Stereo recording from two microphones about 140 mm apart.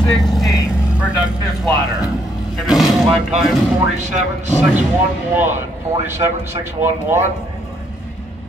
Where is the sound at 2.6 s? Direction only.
5° right (ahead or behind).